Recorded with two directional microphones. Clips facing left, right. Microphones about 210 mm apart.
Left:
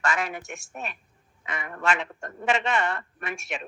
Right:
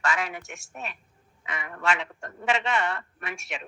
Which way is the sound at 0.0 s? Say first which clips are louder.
Left 1 dB; 50° left (ahead or behind).